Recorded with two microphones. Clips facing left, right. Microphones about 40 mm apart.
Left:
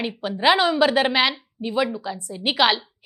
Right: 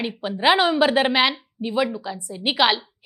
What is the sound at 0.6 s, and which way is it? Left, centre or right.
Speech, right.